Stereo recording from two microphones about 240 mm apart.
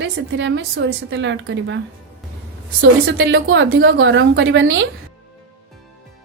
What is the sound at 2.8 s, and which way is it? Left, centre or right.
A woman's voice, right.